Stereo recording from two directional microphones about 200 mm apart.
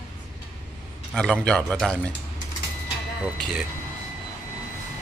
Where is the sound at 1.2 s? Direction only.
5° left (ahead or behind).